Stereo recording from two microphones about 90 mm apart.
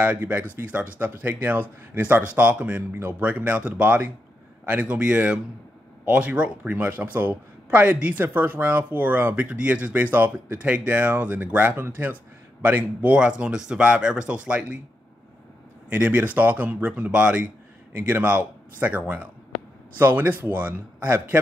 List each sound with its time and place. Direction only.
0.0 s speech: 20° right (ahead or behind)
15.9 s speech: 15° right (ahead or behind)